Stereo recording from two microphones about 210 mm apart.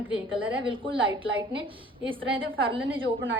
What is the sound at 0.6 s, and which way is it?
A woman's voice, 25° right (ahead or behind).